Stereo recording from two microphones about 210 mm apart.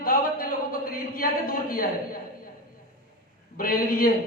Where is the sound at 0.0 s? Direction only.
45° left (ahead or behind).